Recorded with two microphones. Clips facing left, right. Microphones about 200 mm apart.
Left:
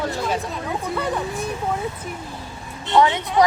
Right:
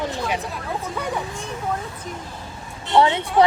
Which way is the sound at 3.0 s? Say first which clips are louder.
Even; 30° right (ahead or behind).